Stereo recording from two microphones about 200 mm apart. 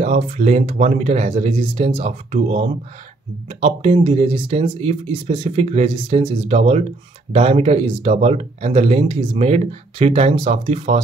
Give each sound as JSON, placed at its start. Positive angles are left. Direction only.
{"t": 0.0, "sound": "speech", "side_deg": -35}